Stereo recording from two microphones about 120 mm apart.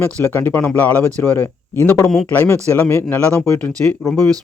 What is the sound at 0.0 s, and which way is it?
Speech, 15° left (ahead or behind).